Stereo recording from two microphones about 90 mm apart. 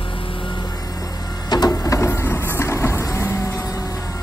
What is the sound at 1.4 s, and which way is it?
Vehicle, 50° left (ahead or behind).